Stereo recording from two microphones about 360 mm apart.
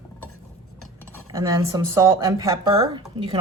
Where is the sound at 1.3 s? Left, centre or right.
Centre.